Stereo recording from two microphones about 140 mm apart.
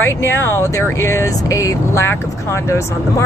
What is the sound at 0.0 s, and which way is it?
Speech, 15° left (ahead or behind).